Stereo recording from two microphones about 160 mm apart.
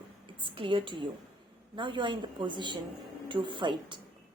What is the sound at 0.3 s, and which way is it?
A woman's voice, 30° right (ahead or behind).